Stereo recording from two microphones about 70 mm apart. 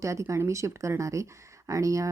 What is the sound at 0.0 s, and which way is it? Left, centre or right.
Speech, right.